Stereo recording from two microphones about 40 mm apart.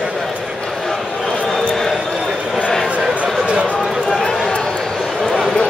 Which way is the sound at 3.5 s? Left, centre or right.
Right.